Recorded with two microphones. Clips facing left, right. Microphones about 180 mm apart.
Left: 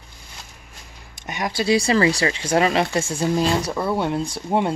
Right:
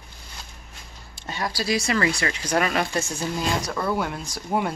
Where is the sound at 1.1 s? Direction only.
20° left (ahead or behind).